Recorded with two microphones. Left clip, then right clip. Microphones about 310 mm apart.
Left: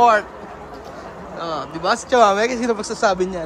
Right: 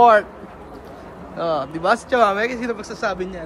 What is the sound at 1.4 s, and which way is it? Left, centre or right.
Speech, centre.